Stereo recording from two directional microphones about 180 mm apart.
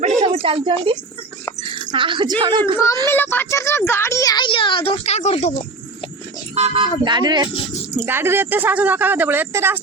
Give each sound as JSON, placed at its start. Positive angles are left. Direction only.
{"t": 0.0, "sound": "a sound", "side_deg": -35}
{"t": 1.7, "sound": "speech", "side_deg": -25}
{"t": 3.1, "sound": "a woman's voice", "side_deg": 10}
{"t": 6.5, "sound": "speech", "side_deg": -30}
{"t": 7.9, "sound": "speech", "side_deg": -10}